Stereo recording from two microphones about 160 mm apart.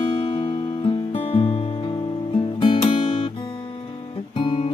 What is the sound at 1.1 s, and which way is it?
Music, 45° left (ahead or behind).